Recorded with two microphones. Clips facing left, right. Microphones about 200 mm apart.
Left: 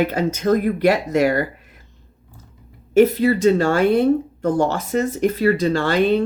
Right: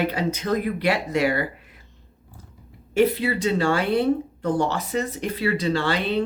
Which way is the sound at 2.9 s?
45° left (ahead or behind).